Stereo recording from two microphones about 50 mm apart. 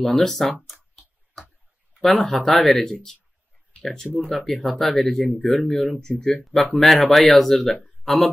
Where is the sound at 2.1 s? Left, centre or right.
Centre.